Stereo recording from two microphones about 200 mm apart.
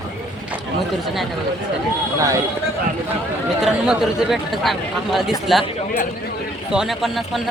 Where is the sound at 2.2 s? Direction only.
15° right (ahead or behind).